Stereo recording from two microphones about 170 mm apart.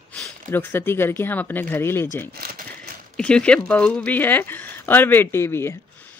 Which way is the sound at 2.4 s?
60° right (ahead or behind).